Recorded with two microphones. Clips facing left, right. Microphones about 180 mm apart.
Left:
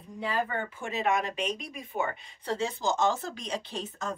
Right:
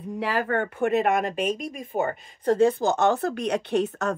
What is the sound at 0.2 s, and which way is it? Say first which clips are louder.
Speech: right 5 dB; 80° right.